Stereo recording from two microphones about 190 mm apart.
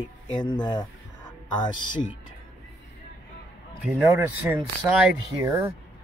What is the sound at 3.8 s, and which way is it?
Speech, centre (ahead or behind).